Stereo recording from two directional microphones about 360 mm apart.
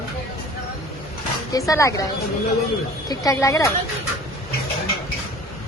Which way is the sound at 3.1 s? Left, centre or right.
Centre.